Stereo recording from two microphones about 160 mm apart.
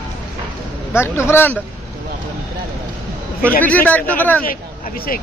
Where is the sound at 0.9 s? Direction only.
15° left (ahead or behind).